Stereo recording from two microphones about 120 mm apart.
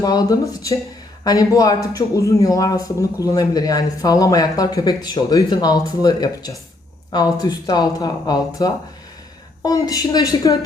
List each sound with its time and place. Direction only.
0.0 s speech: 35° left (ahead or behind)